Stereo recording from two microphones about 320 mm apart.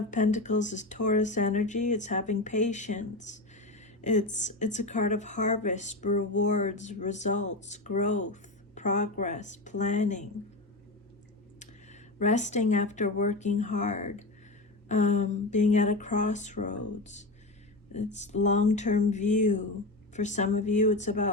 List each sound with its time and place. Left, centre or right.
0.1 s speech: left
11.6 s speech: left